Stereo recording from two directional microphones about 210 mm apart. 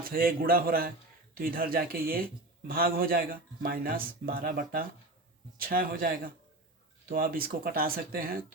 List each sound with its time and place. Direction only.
0.0 s speech: 45° right (ahead or behind)